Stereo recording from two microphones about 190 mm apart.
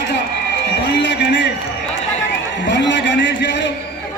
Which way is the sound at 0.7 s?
65° left (ahead or behind).